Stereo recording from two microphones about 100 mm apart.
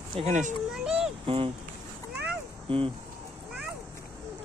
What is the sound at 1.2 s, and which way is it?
Speech, 65° right (ahead or behind).